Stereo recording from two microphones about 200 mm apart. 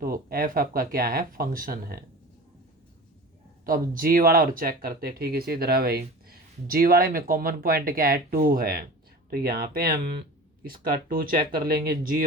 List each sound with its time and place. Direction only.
0.0 s speech: 45° right (ahead or behind)
3.7 s speech: 45° right (ahead or behind)